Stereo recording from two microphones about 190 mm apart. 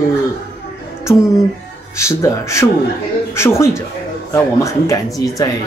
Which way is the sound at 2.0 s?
15° left (ahead or behind).